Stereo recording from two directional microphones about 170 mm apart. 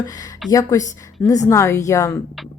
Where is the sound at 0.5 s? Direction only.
20° left (ahead or behind).